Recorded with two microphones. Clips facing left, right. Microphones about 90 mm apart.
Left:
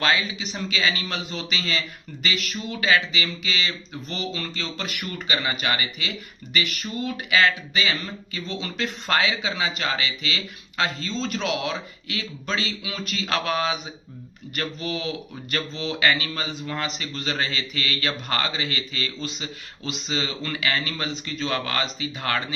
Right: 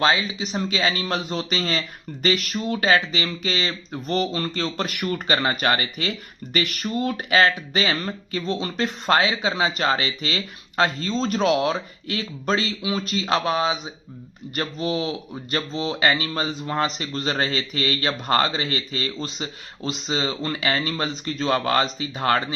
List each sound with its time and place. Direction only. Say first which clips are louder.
0.0 s speech: right 3 dB; 30° right (ahead or behind)